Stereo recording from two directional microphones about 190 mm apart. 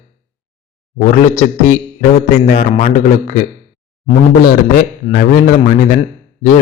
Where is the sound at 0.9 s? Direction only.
40° left (ahead or behind).